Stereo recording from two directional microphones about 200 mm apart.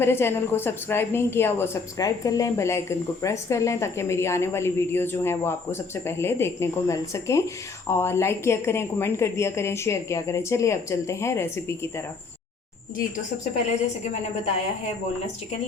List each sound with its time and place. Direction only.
0.0 s speech: 10° left (ahead or behind)
13.7 s a woman's voice: 35° left (ahead or behind)